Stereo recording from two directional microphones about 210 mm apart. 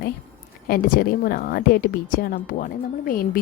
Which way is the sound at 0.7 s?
45° left (ahead or behind).